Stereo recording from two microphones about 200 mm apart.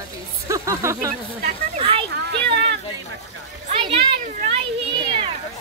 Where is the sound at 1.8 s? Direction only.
25° right (ahead or behind).